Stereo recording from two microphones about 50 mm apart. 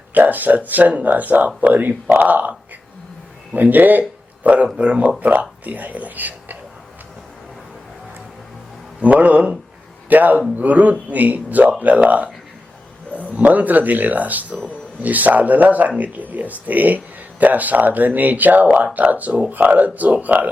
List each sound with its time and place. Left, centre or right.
0.1 s speech: right
4.4 s speech: right
9.0 s speech: right